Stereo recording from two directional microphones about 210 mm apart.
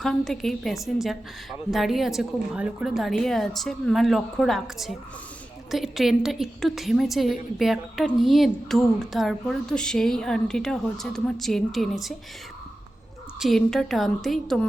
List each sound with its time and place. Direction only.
0.0 s a woman's voice: centre (ahead or behind)
13.4 s a woman's voice: centre (ahead or behind)